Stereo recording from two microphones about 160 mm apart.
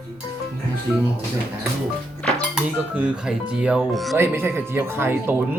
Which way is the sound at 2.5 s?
5° right (ahead or behind).